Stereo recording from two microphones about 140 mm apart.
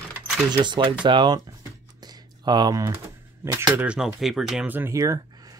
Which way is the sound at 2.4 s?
30° right (ahead or behind).